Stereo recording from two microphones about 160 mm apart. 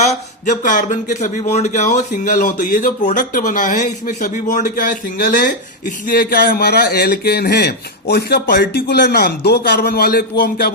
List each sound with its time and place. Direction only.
0.4 s a man's voice: 50° left (ahead or behind); by 10.7 s 70° left (ahead or behind)